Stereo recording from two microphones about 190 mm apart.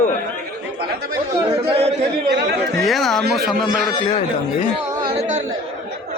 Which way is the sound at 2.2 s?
60° right (ahead or behind).